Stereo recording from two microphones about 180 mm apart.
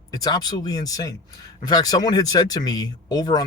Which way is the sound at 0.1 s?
20° left (ahead or behind).